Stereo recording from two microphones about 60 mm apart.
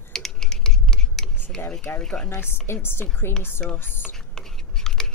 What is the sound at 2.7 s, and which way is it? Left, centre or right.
Speech, left.